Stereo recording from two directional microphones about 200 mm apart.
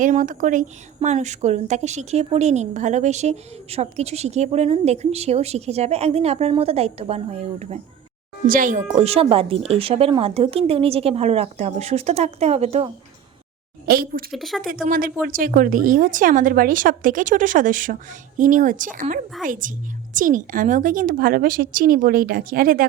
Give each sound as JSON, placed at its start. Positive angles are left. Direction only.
{"t": 0.0, "sound": "a woman's voice", "side_deg": -40}
{"t": 8.4, "sound": "a woman's voice", "side_deg": -45}
{"t": 13.8, "sound": "a woman's voice", "side_deg": -50}
{"t": 14.3, "sound": "speech", "side_deg": 0}
{"t": 14.8, "sound": "a woman's voice", "side_deg": -45}